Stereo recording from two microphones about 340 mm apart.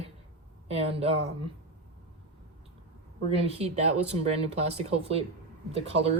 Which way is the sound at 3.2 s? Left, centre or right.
Centre.